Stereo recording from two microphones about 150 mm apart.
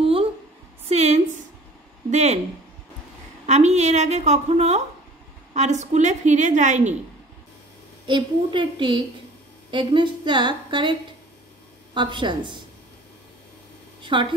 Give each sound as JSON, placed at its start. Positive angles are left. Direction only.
{"t": 0.0, "sound": "a sound", "side_deg": -40}
{"t": 2.0, "sound": "speech", "side_deg": -50}
{"t": 3.4, "sound": "a woman's voice", "side_deg": -50}
{"t": 8.1, "sound": "a woman's voice", "side_deg": -35}
{"t": 14.1, "sound": "a woman's voice", "side_deg": -35}